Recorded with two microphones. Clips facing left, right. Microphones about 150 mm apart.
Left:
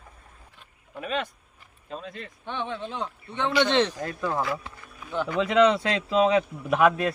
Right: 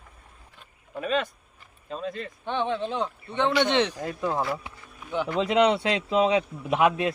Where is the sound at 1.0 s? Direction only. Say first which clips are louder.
Right 3 dB; 35° right (ahead or behind).